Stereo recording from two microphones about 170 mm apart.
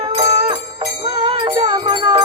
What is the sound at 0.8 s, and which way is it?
Music, 25° right (ahead or behind).